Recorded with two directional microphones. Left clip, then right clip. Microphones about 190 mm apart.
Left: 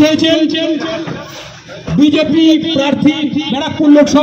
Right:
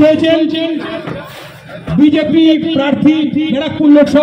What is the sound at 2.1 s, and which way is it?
A man's voice, 30° left (ahead or behind).